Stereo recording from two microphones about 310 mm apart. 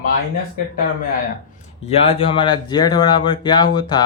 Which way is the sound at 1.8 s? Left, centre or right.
Centre.